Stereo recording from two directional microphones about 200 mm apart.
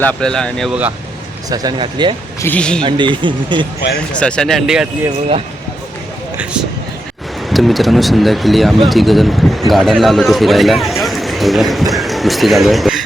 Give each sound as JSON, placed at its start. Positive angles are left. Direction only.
{"t": 0.0, "sound": "speech", "side_deg": 5}
{"t": 1.5, "sound": "speech", "side_deg": -20}
{"t": 2.4, "sound": "speech", "side_deg": 5}
{"t": 2.8, "sound": "speech", "side_deg": -25}
{"t": 4.2, "sound": "speech", "side_deg": 5}
{"t": 7.5, "sound": "speech", "side_deg": 0}